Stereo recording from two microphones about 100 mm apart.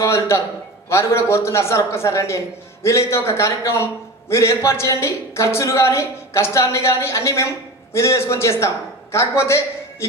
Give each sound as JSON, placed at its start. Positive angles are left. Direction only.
{"t": 0.0, "sound": "a woman's voice", "side_deg": 30}